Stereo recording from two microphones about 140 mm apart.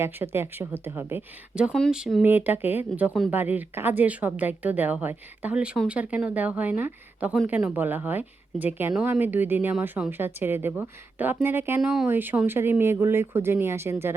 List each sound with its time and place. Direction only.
0.0 s speech: 15° right (ahead or behind)
1.7 s speech: centre (ahead or behind)
2.2 s speech: 15° right (ahead or behind)
11.8 s speech: 5° right (ahead or behind)